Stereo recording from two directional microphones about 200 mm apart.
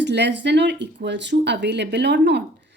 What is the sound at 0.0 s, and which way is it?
Speech, 60° right (ahead or behind).